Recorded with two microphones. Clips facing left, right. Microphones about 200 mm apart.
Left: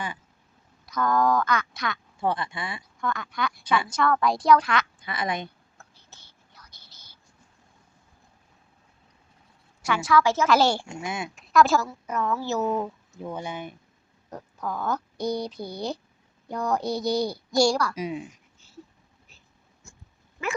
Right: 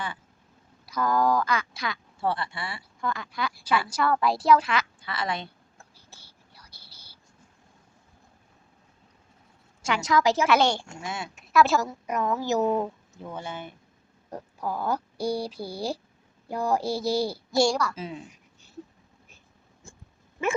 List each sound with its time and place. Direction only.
0.9 s a sound: 5° right (ahead or behind)
1.1 s speech: 30° right (ahead or behind)
2.2 s speech: 15° left (ahead or behind)
3.0 s speech: 30° right (ahead or behind)
4.2 s speech: 5° right (ahead or behind)
4.9 s a woman's voice: 15° left (ahead or behind)
5.7 s whispering: 10° right (ahead or behind)
9.8 s speech: 20° right (ahead or behind)
10.8 s speech: 15° left (ahead or behind)
11.5 s speech: 5° right (ahead or behind)
11.9 s speech: 15° right (ahead or behind)
13.2 s speech: 15° left (ahead or behind)
14.3 s speech: 10° right (ahead or behind)
17.9 s speech: 15° left (ahead or behind)